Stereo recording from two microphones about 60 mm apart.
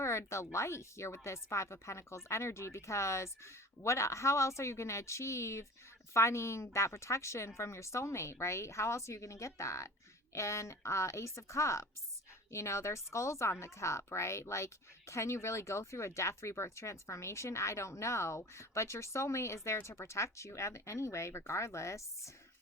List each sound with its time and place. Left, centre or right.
0.0 s speech: left